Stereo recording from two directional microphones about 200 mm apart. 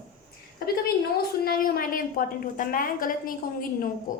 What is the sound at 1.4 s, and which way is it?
A woman's voice, 45° left (ahead or behind).